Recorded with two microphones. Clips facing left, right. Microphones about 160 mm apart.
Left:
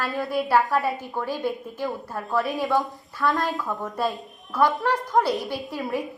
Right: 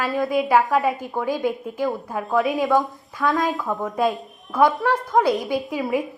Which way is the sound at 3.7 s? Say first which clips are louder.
Right 5 dB; 20° right (ahead or behind).